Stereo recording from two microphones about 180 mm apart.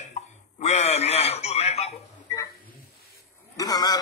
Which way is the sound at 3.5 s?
20° left (ahead or behind).